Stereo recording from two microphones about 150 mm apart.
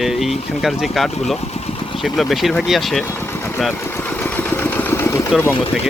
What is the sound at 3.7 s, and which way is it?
Vehicle, 15° left (ahead or behind).